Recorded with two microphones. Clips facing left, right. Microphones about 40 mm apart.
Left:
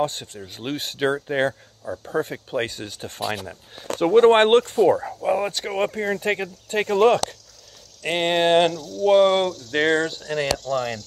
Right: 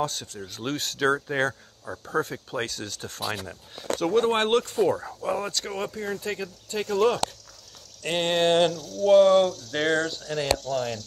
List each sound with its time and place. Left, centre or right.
0.0 s speech: left
0.5 s speech: centre
4.0 s speech: left
4.7 s speech: centre; by 7.2 s left
8.0 s speech: centre